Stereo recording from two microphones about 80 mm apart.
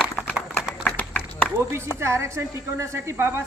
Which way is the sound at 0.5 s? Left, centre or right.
Centre.